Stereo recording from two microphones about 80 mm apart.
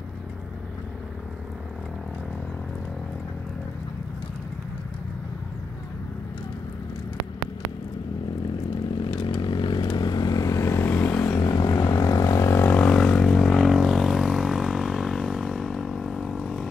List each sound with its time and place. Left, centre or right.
9.2 s vehicle: left
9.8 s vehicle: left
10.8 s vehicle: centre
11.2 s vehicle: left
12.6 s vehicle: centre